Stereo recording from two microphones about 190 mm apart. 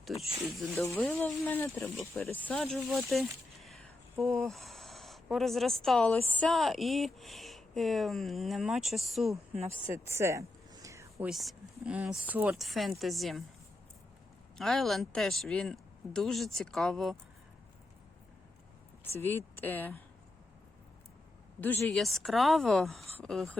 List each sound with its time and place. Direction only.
0.8 s speech: 10° left (ahead or behind)
3.1 s a sound: centre (ahead or behind)
4.2 s speech: centre (ahead or behind)
9.8 s speech: 15° right (ahead or behind)
10.8 s whispering: 15° right (ahead or behind)
11.3 s speech: centre (ahead or behind)
14.6 s speech: centre (ahead or behind)
19.1 s speech: 10° left (ahead or behind)
21.6 s speech: 10° left (ahead or behind)